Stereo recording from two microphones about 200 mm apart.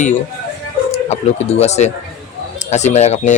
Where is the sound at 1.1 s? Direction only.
35° left (ahead or behind).